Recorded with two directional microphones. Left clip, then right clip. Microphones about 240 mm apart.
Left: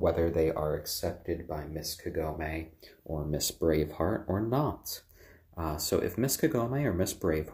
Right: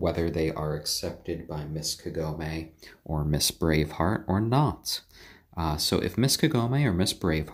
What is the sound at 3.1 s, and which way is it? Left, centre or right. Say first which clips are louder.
Speech: right 5 dB; right.